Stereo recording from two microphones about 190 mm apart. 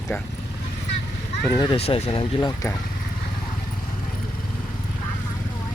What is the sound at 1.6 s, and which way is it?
Speech, 30° left (ahead or behind).